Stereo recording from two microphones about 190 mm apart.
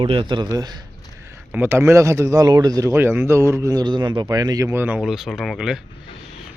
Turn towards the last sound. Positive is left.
turn(degrees=0)  # may be behind; listen again after turning